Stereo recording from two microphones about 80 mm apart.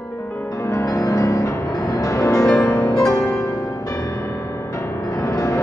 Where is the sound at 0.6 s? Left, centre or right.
Left.